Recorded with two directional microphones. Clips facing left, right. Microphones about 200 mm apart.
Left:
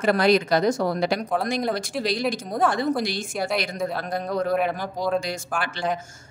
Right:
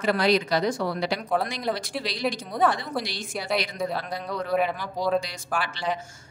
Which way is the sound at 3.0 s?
50° left (ahead or behind).